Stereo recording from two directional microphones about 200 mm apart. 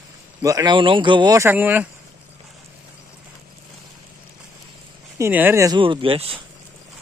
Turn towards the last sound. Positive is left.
turn(degrees=-25)  # may be behind; listen again after turning